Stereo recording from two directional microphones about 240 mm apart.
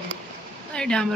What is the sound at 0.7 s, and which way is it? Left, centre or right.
Speech, centre.